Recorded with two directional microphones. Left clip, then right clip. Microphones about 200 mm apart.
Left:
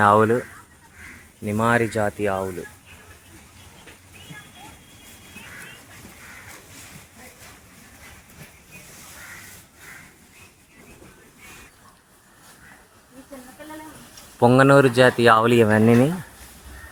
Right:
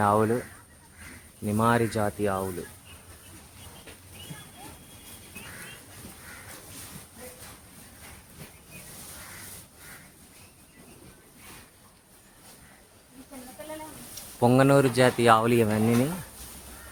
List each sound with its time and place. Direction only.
0.0 s speech: 15° left (ahead or behind)
1.5 s speech: centre (ahead or behind)
14.3 s speech: 15° left (ahead or behind)